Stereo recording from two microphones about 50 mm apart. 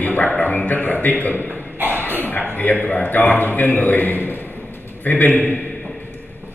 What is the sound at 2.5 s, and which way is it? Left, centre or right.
A man's voice, left.